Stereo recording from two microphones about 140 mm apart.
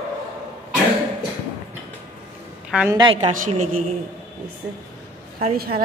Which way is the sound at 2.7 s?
5° right (ahead or behind).